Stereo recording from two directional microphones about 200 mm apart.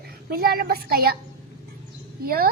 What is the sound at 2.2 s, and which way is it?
Speech, 50° right (ahead or behind).